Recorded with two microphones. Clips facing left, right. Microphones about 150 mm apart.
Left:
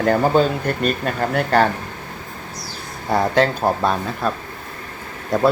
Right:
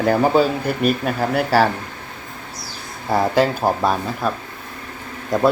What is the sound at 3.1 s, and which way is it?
Speech, 5° right (ahead or behind).